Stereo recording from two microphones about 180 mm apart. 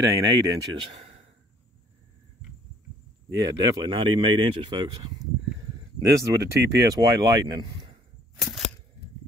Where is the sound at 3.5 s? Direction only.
20° right (ahead or behind).